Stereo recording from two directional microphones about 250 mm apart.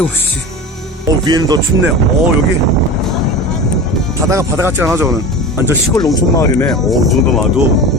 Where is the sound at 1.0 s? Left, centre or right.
Centre.